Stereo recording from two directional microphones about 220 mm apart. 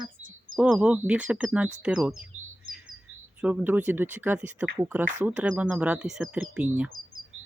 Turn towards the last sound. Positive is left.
turn(degrees=-5)  # may be behind; listen again after turning